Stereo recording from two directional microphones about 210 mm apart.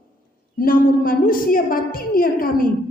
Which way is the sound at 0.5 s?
40° left (ahead or behind).